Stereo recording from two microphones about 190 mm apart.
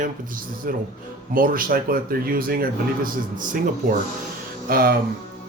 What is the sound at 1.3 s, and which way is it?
Speech, 50° right (ahead or behind).